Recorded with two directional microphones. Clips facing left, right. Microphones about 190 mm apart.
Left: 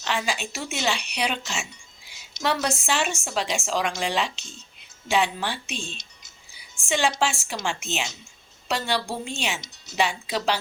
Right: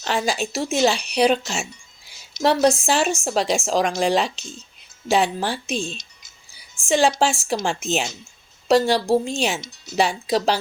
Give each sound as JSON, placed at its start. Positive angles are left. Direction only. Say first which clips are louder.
{"t": 0.0, "sound": "a woman's voice", "louder": "right 5 dB", "side_deg": -40}